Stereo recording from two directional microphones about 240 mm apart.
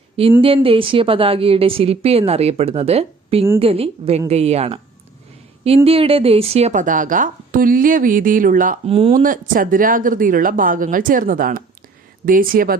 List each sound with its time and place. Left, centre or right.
0.4 s a woman's voice: right
9.2 s speech: right